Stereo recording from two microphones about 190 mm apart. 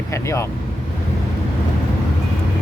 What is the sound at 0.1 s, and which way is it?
Vehicle, 15° left (ahead or behind).